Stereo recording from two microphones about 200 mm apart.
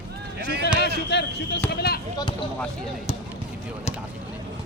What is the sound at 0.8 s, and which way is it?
Speech, 55° left (ahead or behind).